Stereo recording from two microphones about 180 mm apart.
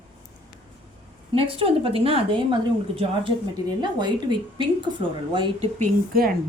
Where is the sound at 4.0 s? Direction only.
25° right (ahead or behind).